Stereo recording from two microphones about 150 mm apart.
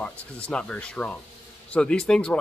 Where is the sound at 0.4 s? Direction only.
5° left (ahead or behind).